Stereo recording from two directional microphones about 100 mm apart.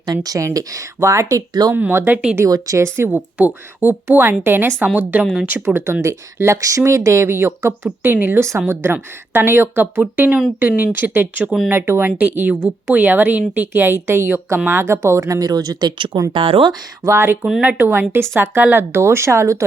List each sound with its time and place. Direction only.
0.0 s speech: 40° right (ahead or behind)
1.7 s speech: 20° right (ahead or behind)
2.4 s speech: 30° right (ahead or behind)
3.1 s a woman's voice: 15° right (ahead or behind)
5.2 s speech: centre (ahead or behind)
5.6 s a woman's voice: 25° right (ahead or behind); by 16.1 s 50° right (ahead or behind)
16.3 s speech: 60° right (ahead or behind)
17.0 s speech: 30° right (ahead or behind)